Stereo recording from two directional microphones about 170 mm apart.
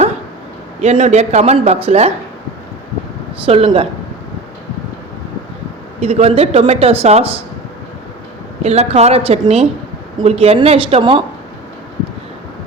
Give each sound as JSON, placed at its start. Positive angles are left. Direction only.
{"t": 0.8, "sound": "speech", "side_deg": -40}
{"t": 3.4, "sound": "speech", "side_deg": -35}
{"t": 6.0, "sound": "speech", "side_deg": -35}
{"t": 8.6, "sound": "speech", "side_deg": -40}